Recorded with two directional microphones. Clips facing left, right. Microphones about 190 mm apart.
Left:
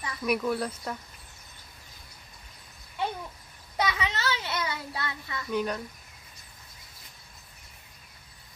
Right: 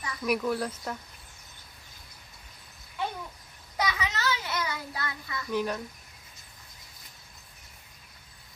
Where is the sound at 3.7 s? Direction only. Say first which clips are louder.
Left 1 dB; 25° left (ahead or behind).